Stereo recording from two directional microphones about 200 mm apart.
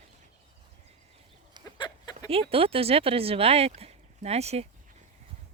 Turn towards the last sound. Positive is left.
turn(degrees=-30)  # may be behind; listen again after turning